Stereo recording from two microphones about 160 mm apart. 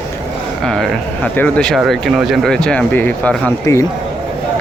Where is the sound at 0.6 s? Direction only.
5° left (ahead or behind).